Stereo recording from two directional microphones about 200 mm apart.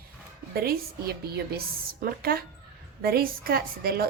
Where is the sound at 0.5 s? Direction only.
50° right (ahead or behind).